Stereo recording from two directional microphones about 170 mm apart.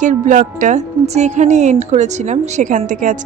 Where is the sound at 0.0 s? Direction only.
45° right (ahead or behind).